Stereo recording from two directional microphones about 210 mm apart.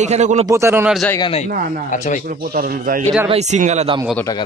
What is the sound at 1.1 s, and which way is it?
Speech, 25° left (ahead or behind).